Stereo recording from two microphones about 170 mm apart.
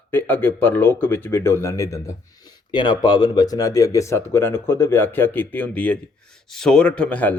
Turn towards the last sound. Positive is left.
turn(degrees=10)  # may be behind; listen again after turning